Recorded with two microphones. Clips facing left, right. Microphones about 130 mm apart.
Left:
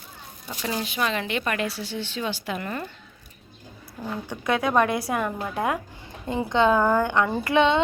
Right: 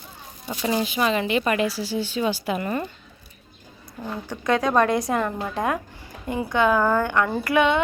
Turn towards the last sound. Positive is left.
turn(degrees=25)  # may be behind; listen again after turning